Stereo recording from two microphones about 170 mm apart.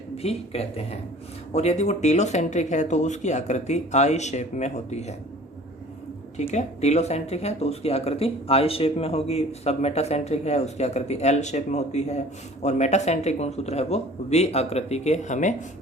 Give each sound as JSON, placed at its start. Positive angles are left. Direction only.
{"t": 0.2, "sound": "speech", "side_deg": 35}
{"t": 6.3, "sound": "speech", "side_deg": 40}